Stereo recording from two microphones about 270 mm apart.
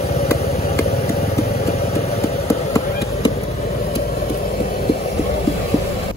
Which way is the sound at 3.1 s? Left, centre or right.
Left.